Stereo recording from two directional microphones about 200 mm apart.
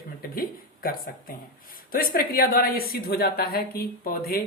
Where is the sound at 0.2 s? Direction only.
45° left (ahead or behind).